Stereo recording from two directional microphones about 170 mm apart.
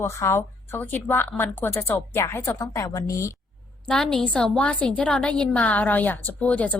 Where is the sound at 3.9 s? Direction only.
5° left (ahead or behind).